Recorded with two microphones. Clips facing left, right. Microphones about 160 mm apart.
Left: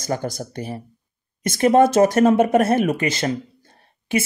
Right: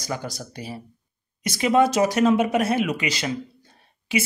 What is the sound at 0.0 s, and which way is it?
Speech, 50° left (ahead or behind).